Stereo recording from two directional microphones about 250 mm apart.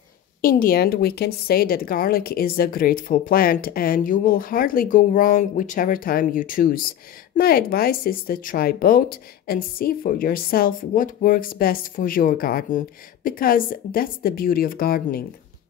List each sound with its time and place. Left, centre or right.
0.4 s speech: left